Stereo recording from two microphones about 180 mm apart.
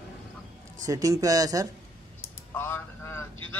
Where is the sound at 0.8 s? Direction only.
20° right (ahead or behind).